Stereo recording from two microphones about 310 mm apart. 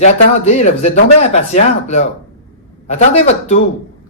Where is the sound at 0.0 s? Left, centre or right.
Left.